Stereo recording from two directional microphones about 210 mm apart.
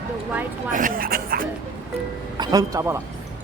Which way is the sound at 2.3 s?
20° right (ahead or behind).